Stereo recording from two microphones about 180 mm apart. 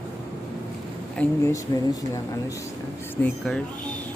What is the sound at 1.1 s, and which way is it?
Speech, 10° left (ahead or behind).